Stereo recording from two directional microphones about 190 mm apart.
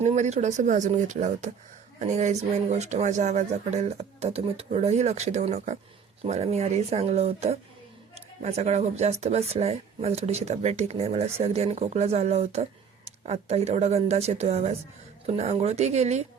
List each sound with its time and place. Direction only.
0.0 s speech: 35° right (ahead or behind)